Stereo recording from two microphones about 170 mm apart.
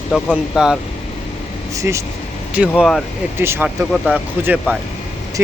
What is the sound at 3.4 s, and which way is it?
Speech, 10° right (ahead or behind).